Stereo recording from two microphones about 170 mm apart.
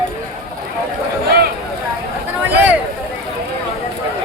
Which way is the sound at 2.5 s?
10° right (ahead or behind).